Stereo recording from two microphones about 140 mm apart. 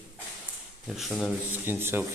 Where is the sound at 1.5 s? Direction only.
15° right (ahead or behind).